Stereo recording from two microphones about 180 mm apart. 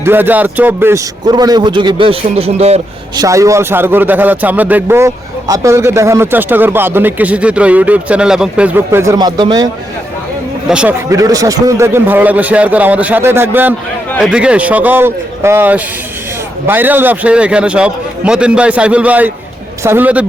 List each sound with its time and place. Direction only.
0.0 s a man's voice: 10° right (ahead or behind); by 2.8 s 35° right (ahead or behind)
3.2 s a man's voice: 15° right (ahead or behind)
10.7 s speech: 5° right (ahead or behind)
11.1 s a man's voice: 20° right (ahead or behind)